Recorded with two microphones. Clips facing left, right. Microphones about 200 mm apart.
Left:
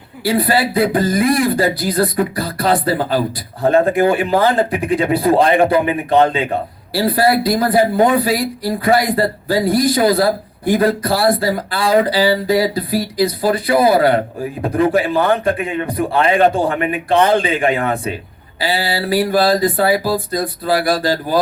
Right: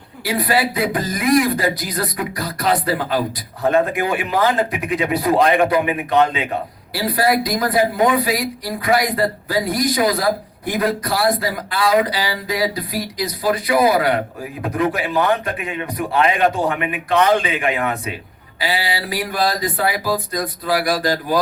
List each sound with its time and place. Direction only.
0.3 s speech: 30° left (ahead or behind)